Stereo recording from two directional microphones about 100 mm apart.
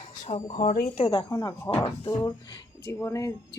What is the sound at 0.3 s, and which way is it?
Speech, 75° left (ahead or behind).